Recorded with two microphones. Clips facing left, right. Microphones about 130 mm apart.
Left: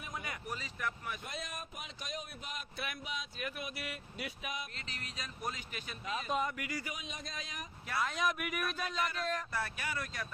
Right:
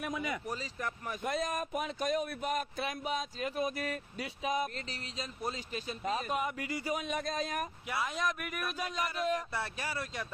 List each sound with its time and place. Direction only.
0.4 s speech: 35° right (ahead or behind)
1.2 s speech: 55° right (ahead or behind)
2.8 s speech: 35° right (ahead or behind)
6.9 s speech: 55° right (ahead or behind)
8.2 s speech: 5° left (ahead or behind)
8.8 s speech: 15° right (ahead or behind)
9.5 s speech: 30° right (ahead or behind)